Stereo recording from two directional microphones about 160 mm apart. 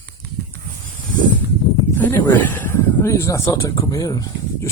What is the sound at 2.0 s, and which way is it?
Speech, 15° left (ahead or behind).